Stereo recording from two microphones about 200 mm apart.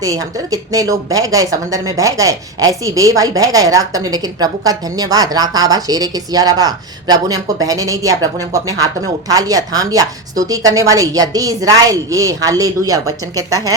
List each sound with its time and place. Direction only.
0.0 s a woman's voice: 15° right (ahead or behind)